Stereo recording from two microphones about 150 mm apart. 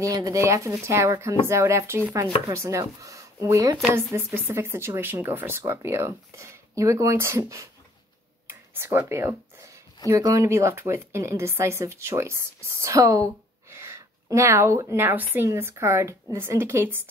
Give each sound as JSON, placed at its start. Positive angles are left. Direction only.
{"t": 0.0, "sound": "speech", "side_deg": -25}